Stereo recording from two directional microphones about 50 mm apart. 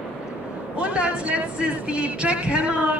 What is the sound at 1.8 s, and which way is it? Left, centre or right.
Music, right.